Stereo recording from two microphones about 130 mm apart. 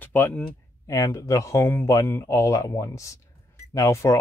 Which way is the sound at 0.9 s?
25° left (ahead or behind).